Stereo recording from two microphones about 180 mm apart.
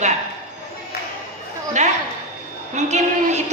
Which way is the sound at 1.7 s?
40° right (ahead or behind).